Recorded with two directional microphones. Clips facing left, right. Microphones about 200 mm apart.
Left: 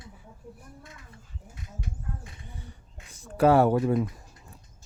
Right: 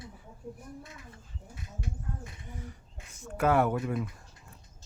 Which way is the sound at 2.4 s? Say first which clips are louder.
Right 3 dB; 30° left (ahead or behind).